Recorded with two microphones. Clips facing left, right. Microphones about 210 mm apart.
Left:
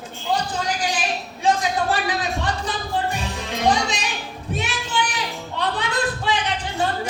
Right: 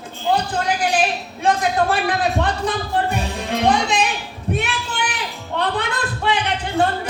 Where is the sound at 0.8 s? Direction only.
60° right (ahead or behind).